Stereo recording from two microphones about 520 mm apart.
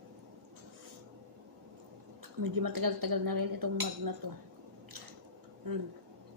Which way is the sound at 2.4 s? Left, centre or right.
Right.